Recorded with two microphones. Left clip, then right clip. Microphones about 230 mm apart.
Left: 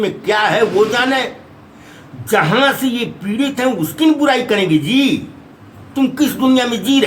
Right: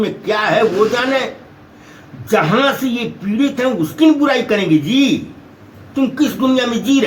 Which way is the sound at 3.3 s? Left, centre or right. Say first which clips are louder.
Right 1 dB; centre.